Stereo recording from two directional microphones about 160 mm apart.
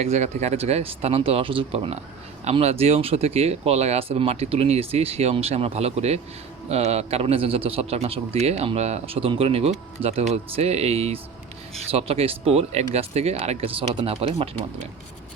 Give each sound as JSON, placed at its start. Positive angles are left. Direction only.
{"t": 0.0, "sound": "a man's voice", "side_deg": -45}